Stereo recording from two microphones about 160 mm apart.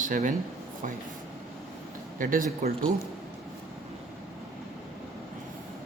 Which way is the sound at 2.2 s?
60° right (ahead or behind).